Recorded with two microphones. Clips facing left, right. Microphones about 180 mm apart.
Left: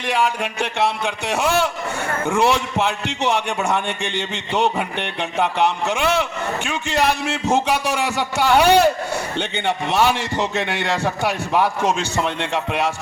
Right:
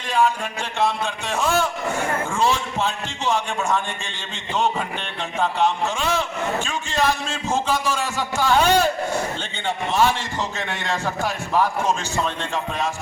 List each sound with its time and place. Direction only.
0.0 s a man's voice: 70° left (ahead or behind)